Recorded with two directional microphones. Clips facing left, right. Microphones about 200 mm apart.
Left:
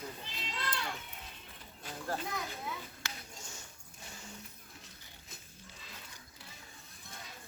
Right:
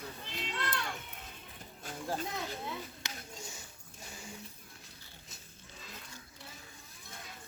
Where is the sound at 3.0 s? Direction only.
20° right (ahead or behind).